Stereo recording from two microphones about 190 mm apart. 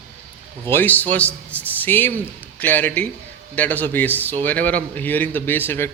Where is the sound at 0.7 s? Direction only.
10° left (ahead or behind).